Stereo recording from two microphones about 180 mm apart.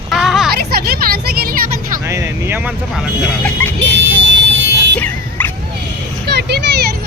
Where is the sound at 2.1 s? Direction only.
15° right (ahead or behind).